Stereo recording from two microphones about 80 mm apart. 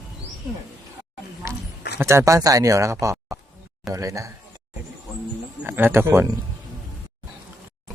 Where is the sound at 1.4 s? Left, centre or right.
Right.